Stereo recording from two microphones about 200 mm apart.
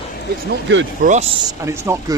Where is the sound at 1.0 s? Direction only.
35° right (ahead or behind).